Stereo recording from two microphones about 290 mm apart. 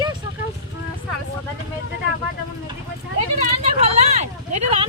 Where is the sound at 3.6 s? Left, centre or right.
Right.